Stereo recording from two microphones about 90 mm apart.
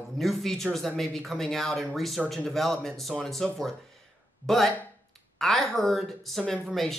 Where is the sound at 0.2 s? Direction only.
Centre (ahead or behind).